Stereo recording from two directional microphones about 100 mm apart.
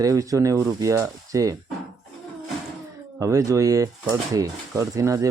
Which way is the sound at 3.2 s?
35° right (ahead or behind).